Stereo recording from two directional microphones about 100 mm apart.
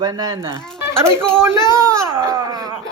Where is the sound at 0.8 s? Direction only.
25° right (ahead or behind).